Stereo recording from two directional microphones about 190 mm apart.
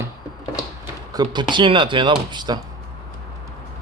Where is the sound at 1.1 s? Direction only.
25° right (ahead or behind).